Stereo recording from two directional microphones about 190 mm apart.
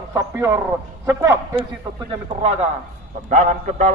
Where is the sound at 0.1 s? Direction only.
15° right (ahead or behind).